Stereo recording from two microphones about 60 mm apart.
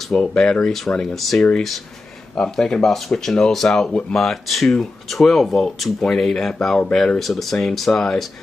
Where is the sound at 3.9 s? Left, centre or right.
Centre.